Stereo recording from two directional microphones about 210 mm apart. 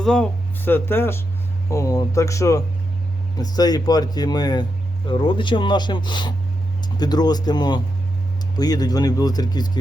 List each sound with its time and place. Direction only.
0.0 s speech: 5° left (ahead or behind); by 9.8 s 20° left (ahead or behind)